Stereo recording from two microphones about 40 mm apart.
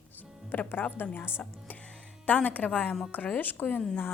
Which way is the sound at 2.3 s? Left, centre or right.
Left.